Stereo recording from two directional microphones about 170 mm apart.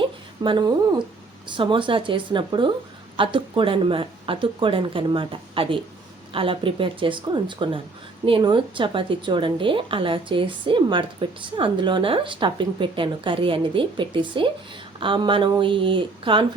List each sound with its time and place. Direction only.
0.4 s a woman's voice: 25° right (ahead or behind)